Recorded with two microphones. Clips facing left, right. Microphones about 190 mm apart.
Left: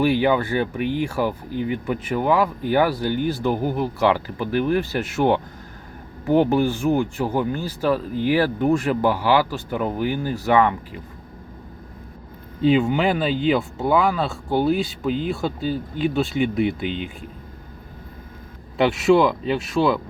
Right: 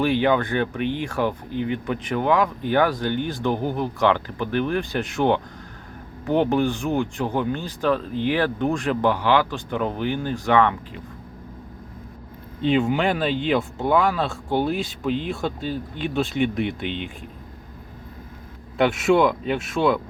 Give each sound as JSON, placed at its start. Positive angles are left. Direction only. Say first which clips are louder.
{"t": 0.0, "sound": "speech", "louder": "left 1 dB", "side_deg": 10}
{"t": 12.6, "sound": "speech", "louder": "left 2 dB", "side_deg": 0}
{"t": 18.8, "sound": "speech", "louder": "left 2 dB", "side_deg": 0}